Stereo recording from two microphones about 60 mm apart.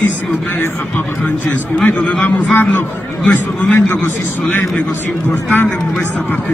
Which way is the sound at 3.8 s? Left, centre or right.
Left.